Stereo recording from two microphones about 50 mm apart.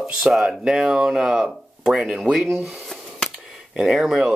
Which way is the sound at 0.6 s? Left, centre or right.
Centre.